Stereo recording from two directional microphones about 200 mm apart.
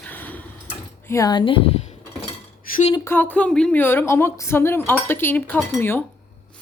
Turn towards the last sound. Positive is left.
turn(degrees=5)  # may be behind; listen again after turning